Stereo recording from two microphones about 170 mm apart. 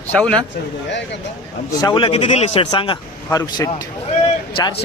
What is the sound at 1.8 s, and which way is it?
A man's voice, 30° left (ahead or behind).